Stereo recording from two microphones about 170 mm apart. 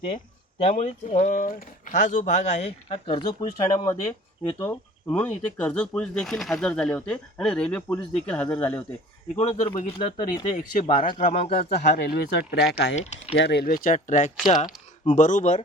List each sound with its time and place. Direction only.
0.6 s speech: 40° left (ahead or behind); by 8.8 s 10° left (ahead or behind)
9.3 s speech: 40° left (ahead or behind)
11.3 s speech: 35° left (ahead or behind)
11.7 s speech: 75° left (ahead or behind)
13.0 s speech: 40° left (ahead or behind)
13.3 s speech: 80° left
13.8 s speech: 45° left (ahead or behind)
14.4 s speech: 25° left (ahead or behind)
15.0 s speech: 45° left (ahead or behind)